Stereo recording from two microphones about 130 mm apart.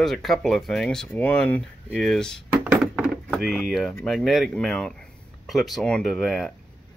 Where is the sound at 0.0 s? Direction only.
Centre (ahead or behind).